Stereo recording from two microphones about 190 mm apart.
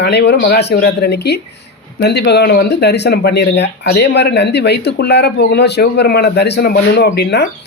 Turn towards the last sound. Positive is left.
turn(degrees=60)  # may be behind; listen again after turning